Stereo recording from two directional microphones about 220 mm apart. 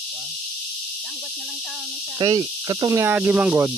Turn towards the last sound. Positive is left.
turn(degrees=-5)  # may be behind; listen again after turning